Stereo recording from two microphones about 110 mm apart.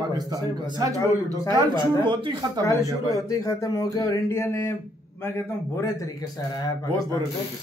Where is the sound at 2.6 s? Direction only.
30° left (ahead or behind).